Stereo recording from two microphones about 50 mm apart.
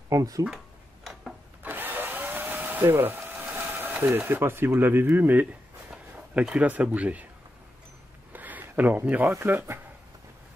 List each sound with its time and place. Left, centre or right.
0.4 s speech: right
1.6 s drill: right
2.8 s sewing machine: right
4.7 s a sound: right
6.5 s speech: right
8.3 s a sound: right
9.2 s speech: right